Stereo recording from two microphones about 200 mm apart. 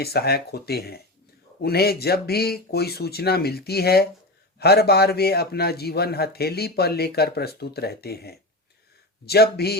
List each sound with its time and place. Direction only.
0.0 s a man's voice: 50° left (ahead or behind)